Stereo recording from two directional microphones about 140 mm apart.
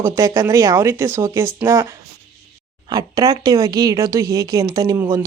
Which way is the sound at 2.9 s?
30° right (ahead or behind).